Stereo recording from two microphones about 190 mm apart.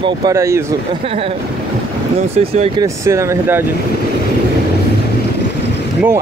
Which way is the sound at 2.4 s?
35° right (ahead or behind).